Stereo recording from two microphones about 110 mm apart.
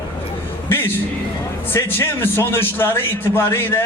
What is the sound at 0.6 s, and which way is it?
A man's voice, 20° left (ahead or behind).